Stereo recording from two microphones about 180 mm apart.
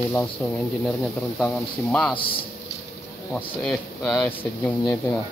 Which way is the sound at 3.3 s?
5° left (ahead or behind).